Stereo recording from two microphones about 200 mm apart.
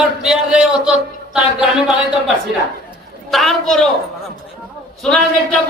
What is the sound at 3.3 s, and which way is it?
Speech, centre (ahead or behind).